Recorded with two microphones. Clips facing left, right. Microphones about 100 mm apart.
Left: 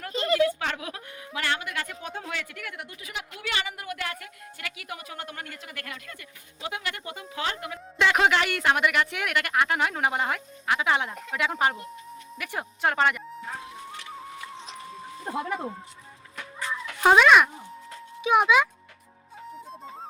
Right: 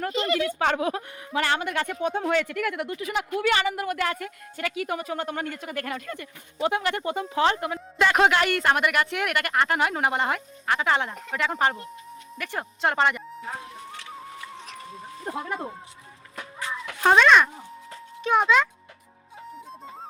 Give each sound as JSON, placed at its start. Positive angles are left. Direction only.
{"t": 0.3, "sound": "speech", "side_deg": 35}
{"t": 0.6, "sound": "a woman's voice", "side_deg": -45}
{"t": 2.2, "sound": "speech", "side_deg": -50}
{"t": 2.5, "sound": "speech", "side_deg": -75}
{"t": 3.0, "sound": "a woman's voice", "side_deg": -40}
{"t": 7.9, "sound": "speech", "side_deg": 0}
{"t": 14.9, "sound": "a sound", "side_deg": 0}
{"t": 17.0, "sound": "speech", "side_deg": 5}